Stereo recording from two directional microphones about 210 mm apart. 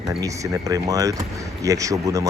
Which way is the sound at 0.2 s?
15° right (ahead or behind).